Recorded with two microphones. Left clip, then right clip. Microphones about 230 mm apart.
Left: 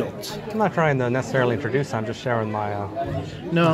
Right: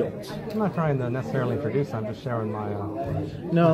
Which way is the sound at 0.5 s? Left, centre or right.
Left.